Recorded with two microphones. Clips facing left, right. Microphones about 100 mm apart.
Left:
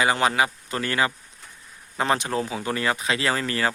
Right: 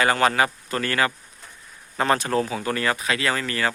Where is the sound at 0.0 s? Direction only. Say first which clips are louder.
Right 2 dB; 15° left (ahead or behind).